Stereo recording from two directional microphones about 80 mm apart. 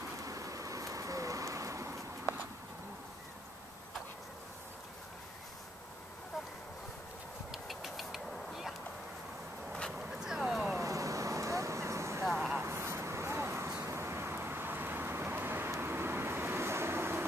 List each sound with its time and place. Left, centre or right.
0.2 s a sound: right
7.5 s vehicle: centre
9.7 s vehicle: centre
9.9 s a sound: centre
10.8 s vehicle: right
12.3 s vehicle: centre
12.5 s vehicle: right